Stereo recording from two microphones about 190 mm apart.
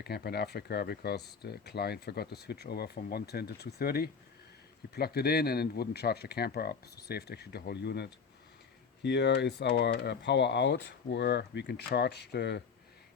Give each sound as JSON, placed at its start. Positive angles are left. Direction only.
{"t": 0.0, "sound": "speech", "side_deg": 55}